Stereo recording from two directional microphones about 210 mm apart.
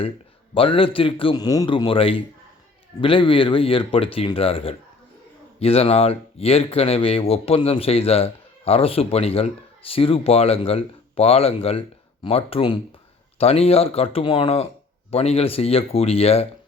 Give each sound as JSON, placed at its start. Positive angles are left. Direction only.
{"t": 0.5, "sound": "speech", "side_deg": 25}